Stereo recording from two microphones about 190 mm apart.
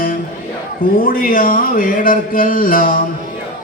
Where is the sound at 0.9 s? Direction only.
50° left (ahead or behind).